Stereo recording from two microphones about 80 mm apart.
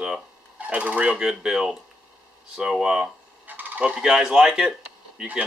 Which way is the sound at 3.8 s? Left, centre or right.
Centre.